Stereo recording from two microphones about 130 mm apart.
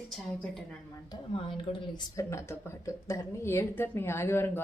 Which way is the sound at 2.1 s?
20° left (ahead or behind).